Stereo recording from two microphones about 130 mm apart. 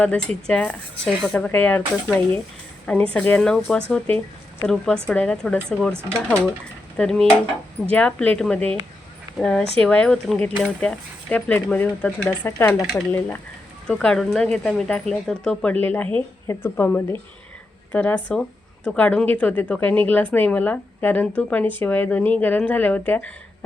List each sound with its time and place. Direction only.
0.0 s speech: 10° left (ahead or behind)
2.8 s speech: 10° left (ahead or behind)
5.9 s speech: 20° right (ahead or behind)
6.9 s speech: 5° left (ahead or behind)